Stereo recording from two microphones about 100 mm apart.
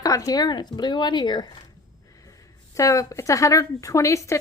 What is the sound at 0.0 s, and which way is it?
Speech, 35° left (ahead or behind).